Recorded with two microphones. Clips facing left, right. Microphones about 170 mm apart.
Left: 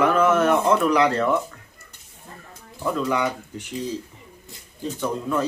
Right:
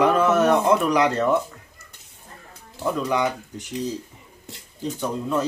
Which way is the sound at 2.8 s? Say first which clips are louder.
Even; 15° right (ahead or behind).